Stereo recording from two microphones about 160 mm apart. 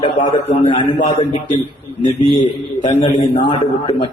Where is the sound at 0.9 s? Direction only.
45° left (ahead or behind).